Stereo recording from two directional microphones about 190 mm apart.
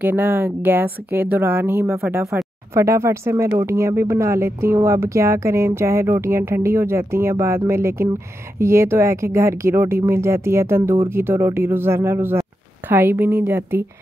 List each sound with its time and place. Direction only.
0.0 s speech: 10° right (ahead or behind)